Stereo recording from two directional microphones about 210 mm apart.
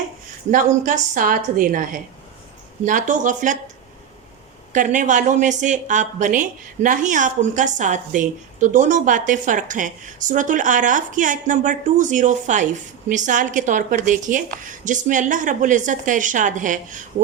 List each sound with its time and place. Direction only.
0.5 s speech: 40° right (ahead or behind)
4.7 s speech: 35° right (ahead or behind)